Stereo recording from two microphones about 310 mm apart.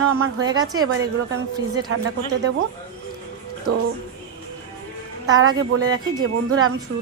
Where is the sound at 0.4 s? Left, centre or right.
Centre.